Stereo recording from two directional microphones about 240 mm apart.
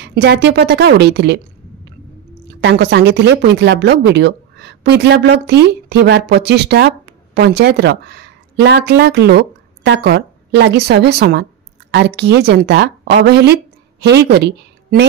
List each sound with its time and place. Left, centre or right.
0.0 s speech: right
2.6 s a woman's voice: right